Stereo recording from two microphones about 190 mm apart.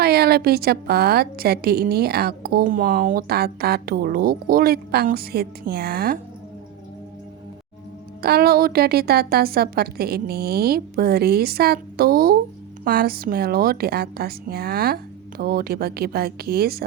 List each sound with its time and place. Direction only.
0.0 s a woman's voice: 55° right (ahead or behind)
8.2 s a woman's voice: 55° right (ahead or behind)